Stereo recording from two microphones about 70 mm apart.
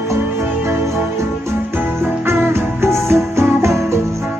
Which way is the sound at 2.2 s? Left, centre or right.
Right.